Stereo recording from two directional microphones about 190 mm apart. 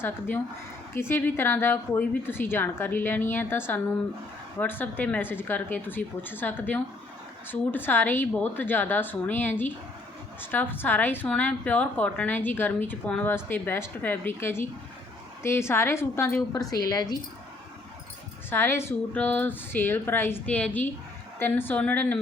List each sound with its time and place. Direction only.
0.0 s a woman's voice: 10° left (ahead or behind)
18.5 s a woman's voice: 10° left (ahead or behind)